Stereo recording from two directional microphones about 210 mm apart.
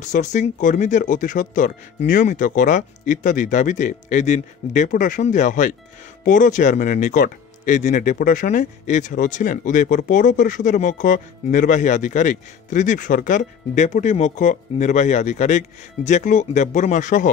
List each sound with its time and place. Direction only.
0.0 s speech: 35° left (ahead or behind)